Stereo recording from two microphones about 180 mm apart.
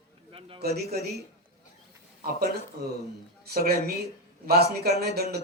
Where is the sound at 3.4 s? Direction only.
55° right (ahead or behind).